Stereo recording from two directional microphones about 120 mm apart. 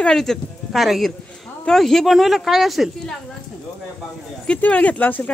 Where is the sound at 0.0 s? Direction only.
5° left (ahead or behind).